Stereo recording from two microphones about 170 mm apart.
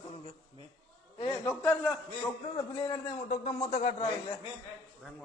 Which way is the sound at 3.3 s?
40° left (ahead or behind).